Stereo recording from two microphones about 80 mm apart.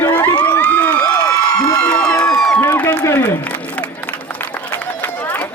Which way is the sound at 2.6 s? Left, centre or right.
Left.